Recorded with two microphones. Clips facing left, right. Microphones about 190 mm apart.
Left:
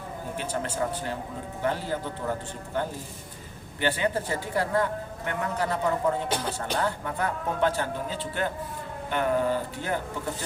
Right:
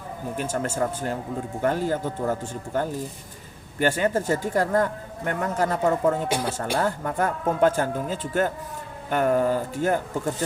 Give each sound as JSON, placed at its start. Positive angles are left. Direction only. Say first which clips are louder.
{"t": 0.3, "sound": "speech", "louder": "right 4 dB", "side_deg": -45}